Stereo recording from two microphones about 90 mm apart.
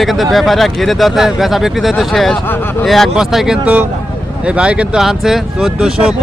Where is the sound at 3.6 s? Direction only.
15° right (ahead or behind).